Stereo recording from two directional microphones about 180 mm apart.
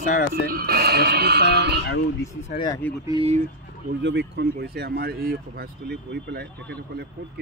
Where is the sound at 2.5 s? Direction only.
25° left (ahead or behind).